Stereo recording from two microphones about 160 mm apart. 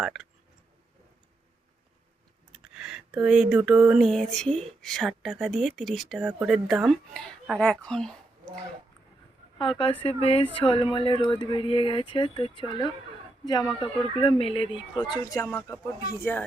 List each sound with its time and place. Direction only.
0.0 s speech: centre (ahead or behind)
2.5 s a sound: 5° right (ahead or behind)
4.8 s speech: centre (ahead or behind)
9.6 s a man's voice: 35° left (ahead or behind); by 16.4 s 15° left (ahead or behind)